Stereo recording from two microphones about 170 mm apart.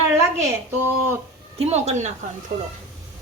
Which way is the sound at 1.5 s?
40° right (ahead or behind).